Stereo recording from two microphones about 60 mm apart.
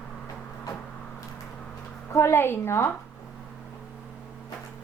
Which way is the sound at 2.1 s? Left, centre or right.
Left.